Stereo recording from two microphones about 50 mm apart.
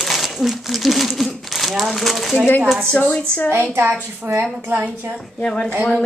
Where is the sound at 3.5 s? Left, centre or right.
Right.